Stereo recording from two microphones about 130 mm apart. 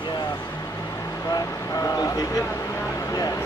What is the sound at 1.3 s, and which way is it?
Speech, 30° left (ahead or behind).